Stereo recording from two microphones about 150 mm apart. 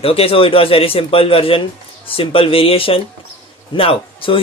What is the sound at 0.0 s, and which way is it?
Speech, 40° left (ahead or behind).